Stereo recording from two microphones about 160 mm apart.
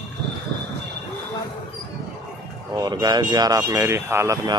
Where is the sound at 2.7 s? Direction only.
25° right (ahead or behind).